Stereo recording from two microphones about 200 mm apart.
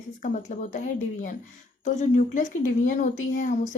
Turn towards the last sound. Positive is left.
turn(degrees=40)  # may be behind; listen again after turning